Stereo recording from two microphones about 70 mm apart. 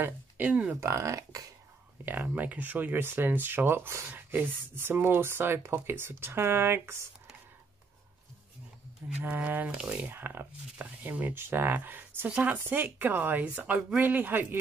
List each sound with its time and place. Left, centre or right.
0.0 s speech: right
0.7 s speech: right
2.0 s speech: right
9.2 s speech: right
9.8 s speech: centre
10.2 s speech: right
14.0 s speech: right